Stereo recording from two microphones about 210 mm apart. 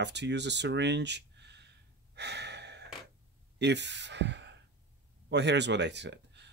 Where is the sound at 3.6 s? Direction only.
55° right (ahead or behind).